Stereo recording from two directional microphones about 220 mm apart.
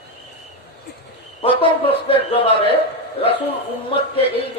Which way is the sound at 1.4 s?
25° left (ahead or behind).